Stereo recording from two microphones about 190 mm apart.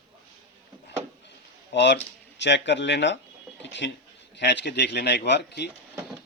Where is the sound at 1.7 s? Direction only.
65° left (ahead or behind).